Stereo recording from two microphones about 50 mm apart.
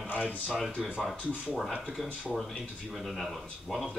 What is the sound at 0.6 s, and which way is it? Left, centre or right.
Speech, centre.